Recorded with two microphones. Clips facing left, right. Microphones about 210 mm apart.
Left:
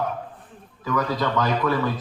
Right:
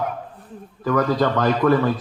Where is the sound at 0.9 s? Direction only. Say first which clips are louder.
Right 5 dB; 50° right (ahead or behind).